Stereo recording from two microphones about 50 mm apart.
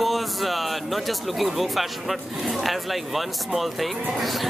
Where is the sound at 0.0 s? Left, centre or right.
Centre.